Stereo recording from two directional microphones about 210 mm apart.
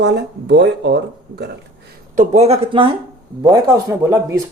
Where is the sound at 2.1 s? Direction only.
35° right (ahead or behind).